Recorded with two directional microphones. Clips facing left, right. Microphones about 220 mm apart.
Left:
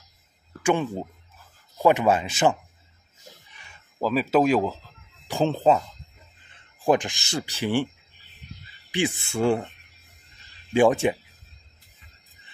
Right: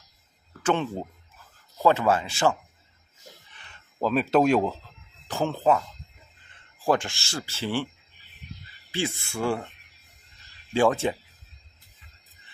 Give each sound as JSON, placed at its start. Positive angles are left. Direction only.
{"t": 0.6, "sound": "speech", "side_deg": 10}
{"t": 1.8, "sound": "rub", "side_deg": 15}
{"t": 3.5, "sound": "a sound", "side_deg": 10}
{"t": 5.3, "sound": "speech", "side_deg": 20}
{"t": 6.8, "sound": "rub", "side_deg": 15}
{"t": 8.9, "sound": "speech", "side_deg": 20}
{"t": 10.7, "sound": "rub", "side_deg": 15}